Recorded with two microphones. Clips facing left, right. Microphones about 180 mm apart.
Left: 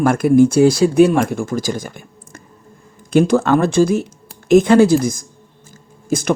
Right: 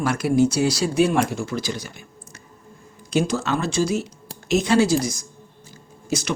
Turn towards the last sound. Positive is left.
turn(degrees=50)  # may be behind; listen again after turning